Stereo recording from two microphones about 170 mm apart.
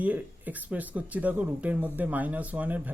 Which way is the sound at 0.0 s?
10° right (ahead or behind).